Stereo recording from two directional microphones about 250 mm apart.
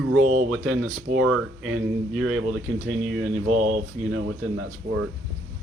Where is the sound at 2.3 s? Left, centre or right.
Right.